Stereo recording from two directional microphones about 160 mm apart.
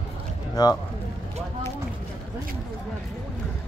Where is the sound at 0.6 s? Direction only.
25° left (ahead or behind).